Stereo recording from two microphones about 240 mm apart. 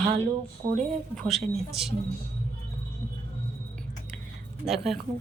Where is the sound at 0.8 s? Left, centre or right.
Centre.